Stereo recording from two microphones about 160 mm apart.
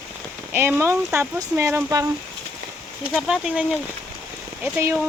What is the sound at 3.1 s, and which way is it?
Speech, 5° right (ahead or behind).